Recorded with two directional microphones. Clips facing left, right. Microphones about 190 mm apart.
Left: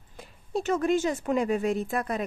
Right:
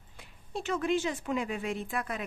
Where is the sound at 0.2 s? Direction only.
40° left (ahead or behind).